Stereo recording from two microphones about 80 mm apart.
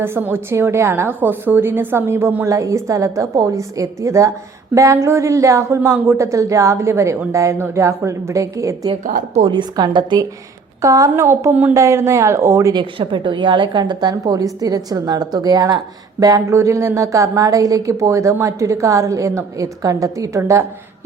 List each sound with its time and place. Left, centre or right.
0.0 s a woman's voice: right
9.5 s a woman's voice: right
10.8 s a woman's voice: right
11.1 s speech: right
11.7 s a woman's voice: right
12.7 s a woman's voice: right
16.2 s a woman's voice: right